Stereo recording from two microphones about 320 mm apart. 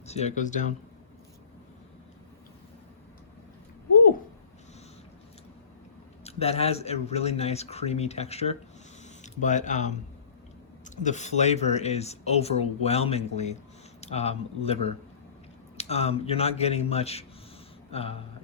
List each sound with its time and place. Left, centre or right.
0.1 s speech: left
6.2 s speech: centre